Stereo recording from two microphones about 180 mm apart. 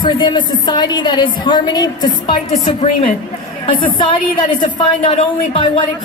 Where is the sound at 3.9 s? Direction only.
30° left (ahead or behind).